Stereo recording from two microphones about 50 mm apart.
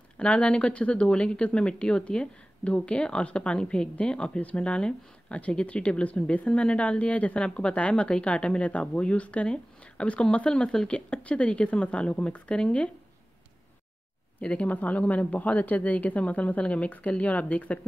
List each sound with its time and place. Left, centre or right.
0.2 s speech: left
14.4 s a woman's voice: left